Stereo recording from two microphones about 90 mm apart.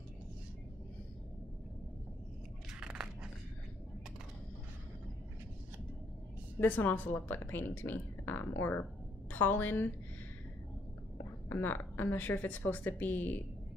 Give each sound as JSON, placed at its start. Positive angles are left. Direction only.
{"t": 2.8, "sound": "a sound", "side_deg": -10}
{"t": 6.6, "sound": "speech", "side_deg": 20}
{"t": 11.4, "sound": "speech", "side_deg": 20}